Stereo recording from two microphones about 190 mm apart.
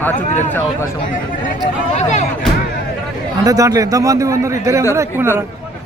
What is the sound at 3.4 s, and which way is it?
A man's voice, 20° right (ahead or behind).